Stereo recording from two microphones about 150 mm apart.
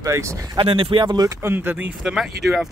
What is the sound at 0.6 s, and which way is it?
Speech, 35° right (ahead or behind).